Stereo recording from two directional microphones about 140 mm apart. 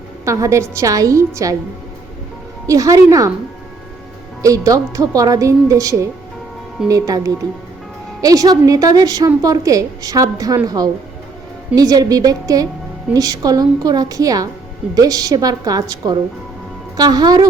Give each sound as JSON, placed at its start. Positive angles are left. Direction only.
{"t": 0.3, "sound": "a woman's voice", "side_deg": -20}
{"t": 2.6, "sound": "a woman's voice", "side_deg": -25}
{"t": 4.4, "sound": "a woman's voice", "side_deg": -25}